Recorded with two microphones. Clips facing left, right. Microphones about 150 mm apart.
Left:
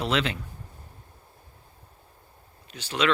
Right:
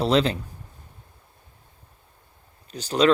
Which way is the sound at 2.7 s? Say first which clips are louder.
Right 7 dB; 40° right (ahead or behind).